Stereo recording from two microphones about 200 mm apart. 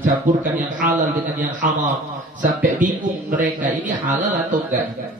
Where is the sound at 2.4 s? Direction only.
40° right (ahead or behind).